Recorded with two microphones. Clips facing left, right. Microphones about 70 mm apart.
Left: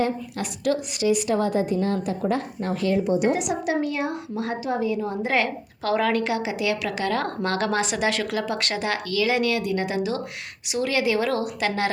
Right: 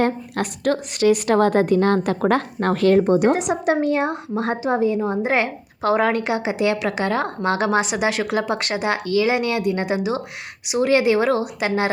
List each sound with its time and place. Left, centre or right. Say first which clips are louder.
0.0 s a woman's voice: right 4 dB; right
3.0 s a woman's voice: right 5 dB; right
3.3 s a woman's voice: right 4 dB; right